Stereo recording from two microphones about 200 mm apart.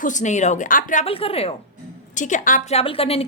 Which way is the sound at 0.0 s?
35° left (ahead or behind).